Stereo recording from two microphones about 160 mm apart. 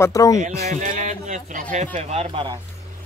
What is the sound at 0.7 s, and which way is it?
Speech, 50° right (ahead or behind).